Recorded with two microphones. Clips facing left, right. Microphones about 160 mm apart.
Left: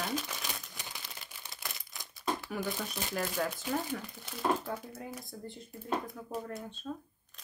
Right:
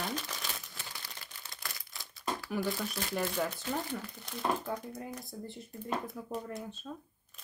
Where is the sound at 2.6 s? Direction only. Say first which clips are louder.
Right 2 dB; 20° left (ahead or behind).